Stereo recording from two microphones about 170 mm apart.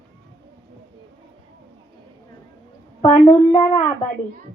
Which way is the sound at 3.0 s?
30° left (ahead or behind).